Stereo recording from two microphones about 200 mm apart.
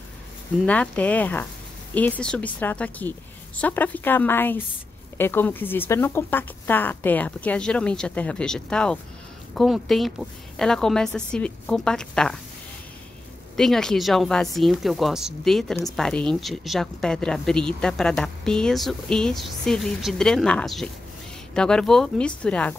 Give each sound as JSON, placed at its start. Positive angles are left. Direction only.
{"t": 0.7, "sound": "speech", "side_deg": 5}
{"t": 13.6, "sound": "speech", "side_deg": 0}